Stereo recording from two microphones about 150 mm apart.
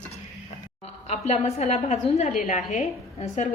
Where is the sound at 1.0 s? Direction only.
45° left (ahead or behind).